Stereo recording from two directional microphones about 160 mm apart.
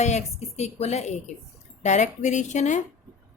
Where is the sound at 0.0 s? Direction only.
45° left (ahead or behind).